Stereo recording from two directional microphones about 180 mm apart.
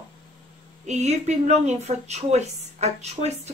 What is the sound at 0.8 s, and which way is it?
A woman's voice, 40° right (ahead or behind).